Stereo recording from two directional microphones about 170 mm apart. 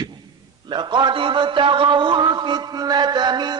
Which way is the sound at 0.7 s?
25° right (ahead or behind).